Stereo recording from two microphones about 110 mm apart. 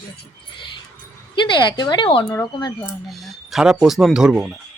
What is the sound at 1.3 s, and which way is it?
A woman's voice, 45° left (ahead or behind).